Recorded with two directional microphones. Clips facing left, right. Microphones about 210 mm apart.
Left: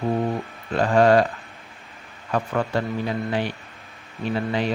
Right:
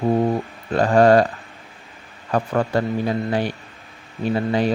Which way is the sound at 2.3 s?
40° right (ahead or behind).